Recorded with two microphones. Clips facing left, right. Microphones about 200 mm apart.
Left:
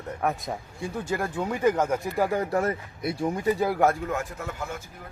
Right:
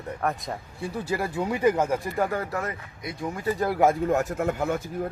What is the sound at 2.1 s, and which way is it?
Speech, 5° left (ahead or behind).